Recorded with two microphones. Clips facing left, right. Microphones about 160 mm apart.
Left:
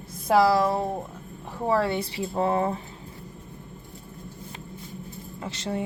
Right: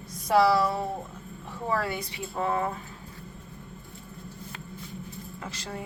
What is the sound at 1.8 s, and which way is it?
Speech, 30° left (ahead or behind).